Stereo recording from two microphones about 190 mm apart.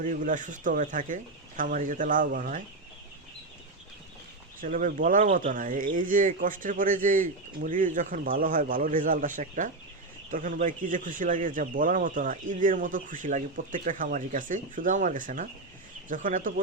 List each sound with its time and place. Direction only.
0.0 s speech: 45° right (ahead or behind)
4.6 s speech: 45° right (ahead or behind)